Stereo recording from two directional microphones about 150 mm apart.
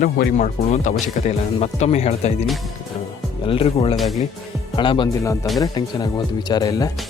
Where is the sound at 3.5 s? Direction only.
40° left (ahead or behind).